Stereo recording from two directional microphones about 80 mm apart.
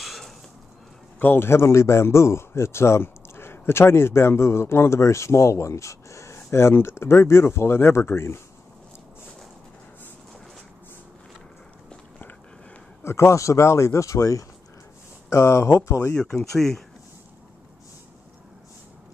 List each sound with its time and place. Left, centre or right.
0.0 s a sound: centre
1.2 s speech: left
13.0 s speech: left
16.2 s speech: centre